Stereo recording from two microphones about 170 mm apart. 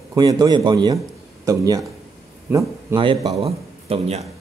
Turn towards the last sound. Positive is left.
turn(degrees=-35)  # may be behind; listen again after turning